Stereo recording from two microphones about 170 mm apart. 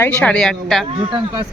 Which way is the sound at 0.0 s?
5° left (ahead or behind).